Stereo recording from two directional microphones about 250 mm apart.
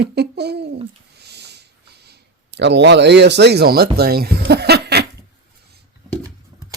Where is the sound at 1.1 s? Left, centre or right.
Right.